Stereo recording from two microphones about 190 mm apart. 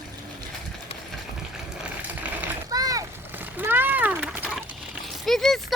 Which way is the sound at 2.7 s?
20° right (ahead or behind).